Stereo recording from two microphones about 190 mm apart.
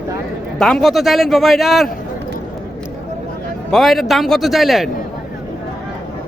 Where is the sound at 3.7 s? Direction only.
Centre (ahead or behind).